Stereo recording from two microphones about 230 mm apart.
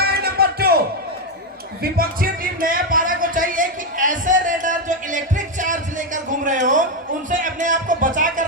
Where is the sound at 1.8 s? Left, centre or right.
Right.